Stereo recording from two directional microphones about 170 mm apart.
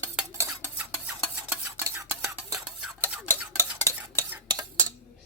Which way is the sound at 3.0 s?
5° right (ahead or behind).